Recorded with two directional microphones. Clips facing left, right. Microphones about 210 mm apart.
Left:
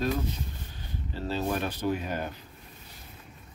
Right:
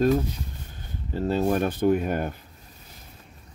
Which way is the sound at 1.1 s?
50° right (ahead or behind).